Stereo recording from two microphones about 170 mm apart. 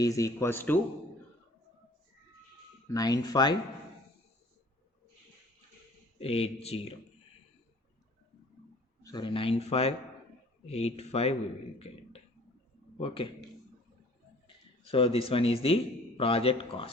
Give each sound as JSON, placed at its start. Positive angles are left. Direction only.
{"t": 0.0, "sound": "speech", "side_deg": 20}
{"t": 2.9, "sound": "speech", "side_deg": 20}
{"t": 6.1, "sound": "speech", "side_deg": 35}
{"t": 9.0, "sound": "speech", "side_deg": 25}
{"t": 13.0, "sound": "speech", "side_deg": 30}
{"t": 14.4, "sound": "a man's voice", "side_deg": 30}